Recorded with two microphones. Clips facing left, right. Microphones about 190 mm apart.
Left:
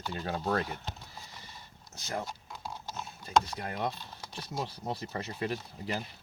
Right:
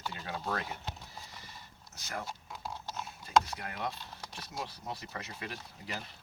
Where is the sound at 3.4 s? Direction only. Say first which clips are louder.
Left 4 dB; 30° left (ahead or behind).